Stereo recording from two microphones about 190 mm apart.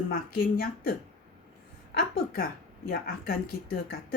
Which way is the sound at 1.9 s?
50° left (ahead or behind).